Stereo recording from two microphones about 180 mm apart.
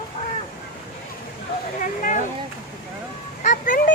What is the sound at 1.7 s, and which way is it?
Speech, 45° left (ahead or behind).